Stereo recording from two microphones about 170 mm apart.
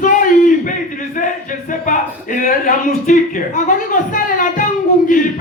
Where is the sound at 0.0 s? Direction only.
50° left (ahead or behind).